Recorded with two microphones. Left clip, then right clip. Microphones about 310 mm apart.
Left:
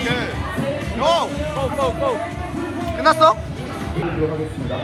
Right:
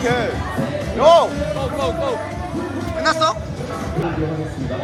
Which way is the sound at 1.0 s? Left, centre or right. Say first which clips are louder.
Right 7 dB; right.